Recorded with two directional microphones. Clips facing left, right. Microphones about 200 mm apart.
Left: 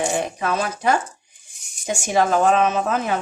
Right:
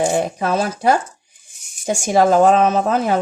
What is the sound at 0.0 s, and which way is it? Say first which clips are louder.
Speech: right 5 dB; 35° right (ahead or behind).